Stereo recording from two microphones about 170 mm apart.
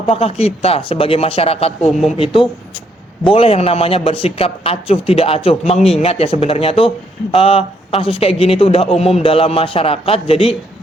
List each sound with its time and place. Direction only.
0.0 s a man's voice: 35° left (ahead or behind)
1.9 s speech: centre (ahead or behind)
2.1 s a man's voice: 30° left (ahead or behind)